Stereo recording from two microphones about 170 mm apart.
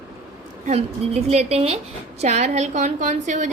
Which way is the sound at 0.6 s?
40° right (ahead or behind).